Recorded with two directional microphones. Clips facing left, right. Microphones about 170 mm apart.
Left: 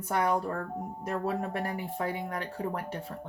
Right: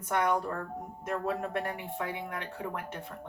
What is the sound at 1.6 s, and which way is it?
Speech, 35° left (ahead or behind).